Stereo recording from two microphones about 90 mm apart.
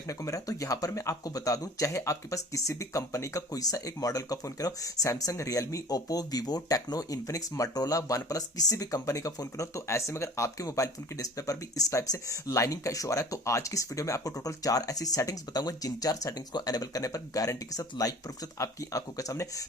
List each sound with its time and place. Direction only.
0.1 s speech: 35° left (ahead or behind)